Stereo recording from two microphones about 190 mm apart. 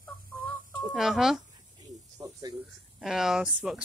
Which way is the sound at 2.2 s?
25° right (ahead or behind).